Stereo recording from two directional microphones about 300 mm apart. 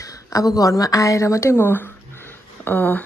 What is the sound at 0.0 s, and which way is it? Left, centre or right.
Speech, centre.